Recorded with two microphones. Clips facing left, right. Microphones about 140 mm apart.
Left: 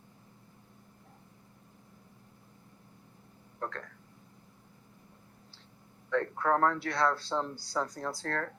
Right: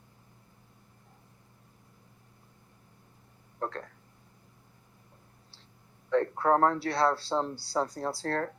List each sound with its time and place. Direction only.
3.6 s speech: 30° right (ahead or behind)
6.1 s speech: 30° right (ahead or behind)